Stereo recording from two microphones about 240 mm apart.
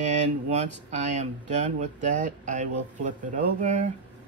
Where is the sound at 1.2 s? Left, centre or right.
Right.